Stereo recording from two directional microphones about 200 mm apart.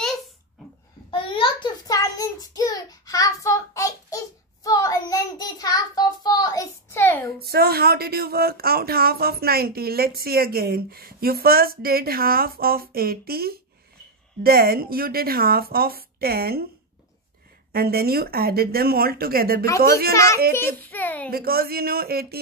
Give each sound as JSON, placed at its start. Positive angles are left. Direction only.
{"t": 1.1, "sound": "child singing", "side_deg": 25}
{"t": 7.3, "sound": "speech", "side_deg": -50}
{"t": 17.7, "sound": "speech", "side_deg": -50}
{"t": 20.1, "sound": "a child's voice", "side_deg": 15}
{"t": 21.3, "sound": "speech", "side_deg": -50}